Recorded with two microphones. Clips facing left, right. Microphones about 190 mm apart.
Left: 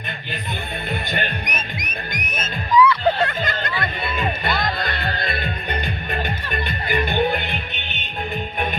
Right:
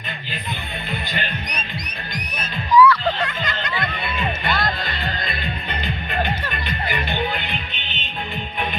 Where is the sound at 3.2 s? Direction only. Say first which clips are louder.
Left 2 dB; 55° left (ahead or behind).